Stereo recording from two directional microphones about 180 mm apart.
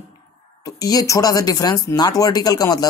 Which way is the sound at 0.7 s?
20° left (ahead or behind).